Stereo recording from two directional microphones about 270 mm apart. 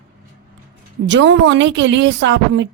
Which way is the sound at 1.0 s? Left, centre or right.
Right.